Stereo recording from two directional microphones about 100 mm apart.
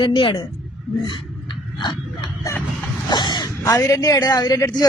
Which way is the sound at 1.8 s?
50° left (ahead or behind).